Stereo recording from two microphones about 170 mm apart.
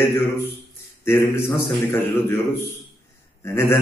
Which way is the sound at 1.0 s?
15° left (ahead or behind).